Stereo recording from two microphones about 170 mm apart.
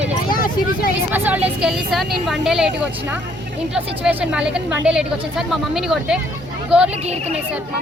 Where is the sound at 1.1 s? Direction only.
10° right (ahead or behind).